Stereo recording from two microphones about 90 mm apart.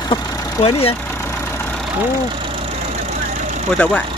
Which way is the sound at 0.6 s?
90° left.